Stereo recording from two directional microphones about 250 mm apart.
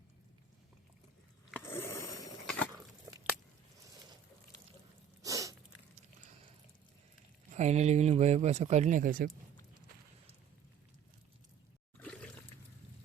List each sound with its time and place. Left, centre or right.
1.5 s a sound: centre
5.2 s sneeze: centre
7.5 s speech: right
11.9 s trickle: centre